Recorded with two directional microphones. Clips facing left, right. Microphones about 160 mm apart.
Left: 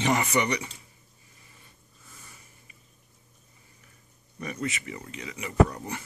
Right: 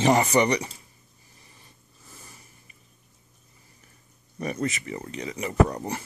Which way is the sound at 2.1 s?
35° right (ahead or behind).